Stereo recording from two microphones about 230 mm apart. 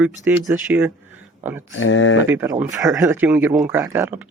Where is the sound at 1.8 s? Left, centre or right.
Left.